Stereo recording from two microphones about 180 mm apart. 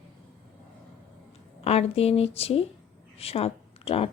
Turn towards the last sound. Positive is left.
turn(degrees=30)  # may be behind; listen again after turning